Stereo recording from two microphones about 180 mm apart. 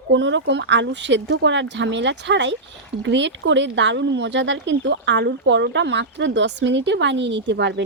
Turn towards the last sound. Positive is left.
turn(degrees=-75)  # may be behind; listen again after turning